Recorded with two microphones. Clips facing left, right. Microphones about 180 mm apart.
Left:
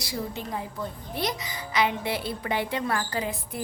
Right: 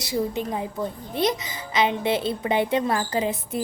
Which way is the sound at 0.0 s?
20° right (ahead or behind).